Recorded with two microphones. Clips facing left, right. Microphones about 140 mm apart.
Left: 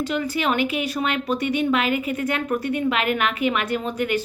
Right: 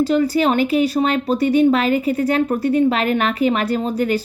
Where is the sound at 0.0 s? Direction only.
35° right (ahead or behind).